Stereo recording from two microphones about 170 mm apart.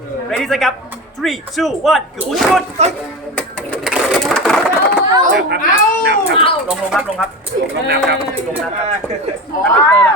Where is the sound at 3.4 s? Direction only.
Centre (ahead or behind).